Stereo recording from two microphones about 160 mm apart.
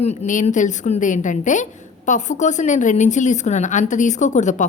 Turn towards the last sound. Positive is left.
turn(degrees=50)  # may be behind; listen again after turning